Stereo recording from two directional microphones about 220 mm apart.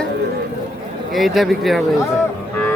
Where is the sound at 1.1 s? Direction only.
Centre (ahead or behind).